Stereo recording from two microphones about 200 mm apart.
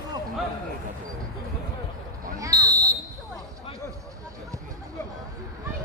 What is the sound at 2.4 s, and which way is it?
Basketball bounce, 15° right (ahead or behind).